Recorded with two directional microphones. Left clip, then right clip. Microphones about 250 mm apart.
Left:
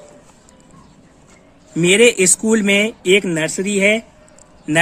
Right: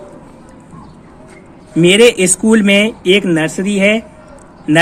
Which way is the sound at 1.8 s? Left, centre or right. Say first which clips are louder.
Right 4 dB; left.